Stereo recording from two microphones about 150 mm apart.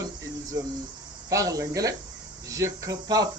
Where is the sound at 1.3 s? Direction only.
20° right (ahead or behind).